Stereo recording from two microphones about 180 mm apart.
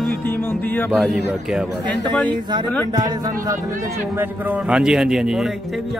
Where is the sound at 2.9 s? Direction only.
20° right (ahead or behind).